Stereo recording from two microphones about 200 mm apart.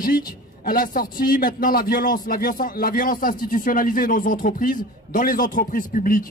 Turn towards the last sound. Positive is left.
turn(degrees=45)  # may be behind; listen again after turning